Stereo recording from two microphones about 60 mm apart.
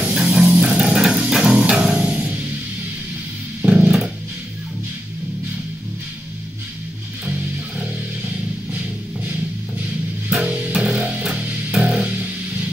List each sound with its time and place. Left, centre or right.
0.1 s music: centre
3.6 s music: right
8.3 s music: right
10.3 s music: centre